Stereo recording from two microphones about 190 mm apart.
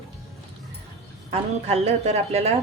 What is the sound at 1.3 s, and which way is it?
A woman's voice, 35° right (ahead or behind).